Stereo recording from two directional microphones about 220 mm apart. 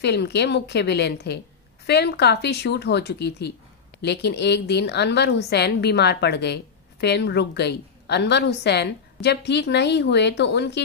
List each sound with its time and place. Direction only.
0.0 s a woman's voice: 50° left (ahead or behind)